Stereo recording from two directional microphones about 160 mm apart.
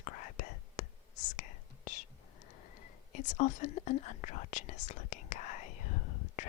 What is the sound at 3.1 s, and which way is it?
Speech, 50° left (ahead or behind).